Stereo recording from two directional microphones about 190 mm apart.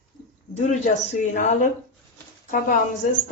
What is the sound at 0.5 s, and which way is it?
Speech, 40° left (ahead or behind).